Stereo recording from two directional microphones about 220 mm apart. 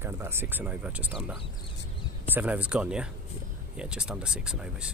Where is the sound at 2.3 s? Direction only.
5° right (ahead or behind).